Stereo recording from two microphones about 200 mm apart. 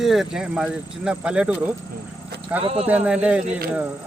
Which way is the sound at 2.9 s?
5° right (ahead or behind).